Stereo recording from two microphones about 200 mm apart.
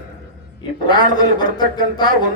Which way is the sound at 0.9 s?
20° left (ahead or behind).